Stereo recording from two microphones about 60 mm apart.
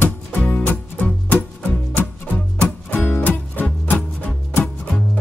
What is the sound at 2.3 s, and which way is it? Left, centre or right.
Music, left.